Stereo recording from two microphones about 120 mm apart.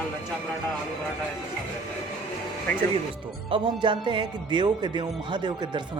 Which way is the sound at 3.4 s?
45° right (ahead or behind).